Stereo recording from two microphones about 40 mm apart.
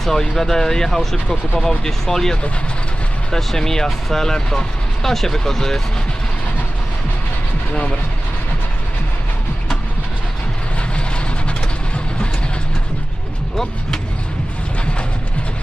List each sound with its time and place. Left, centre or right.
0.0 s speech: centre